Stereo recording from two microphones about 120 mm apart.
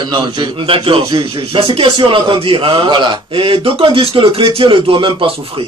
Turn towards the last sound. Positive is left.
turn(degrees=-45)  # may be behind; listen again after turning